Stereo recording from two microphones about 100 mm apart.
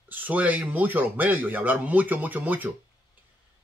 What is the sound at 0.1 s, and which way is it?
Speech, 15° right (ahead or behind).